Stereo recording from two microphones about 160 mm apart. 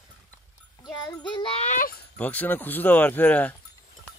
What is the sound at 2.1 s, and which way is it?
Speech, 10° left (ahead or behind).